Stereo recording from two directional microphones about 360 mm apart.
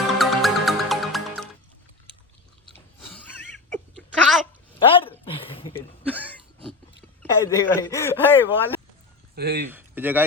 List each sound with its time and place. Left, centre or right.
0.2 s music: centre
3.7 s a sound: centre
4.8 s a sound: centre
7.2 s speech: centre
9.3 s speech: right
9.6 s speech: centre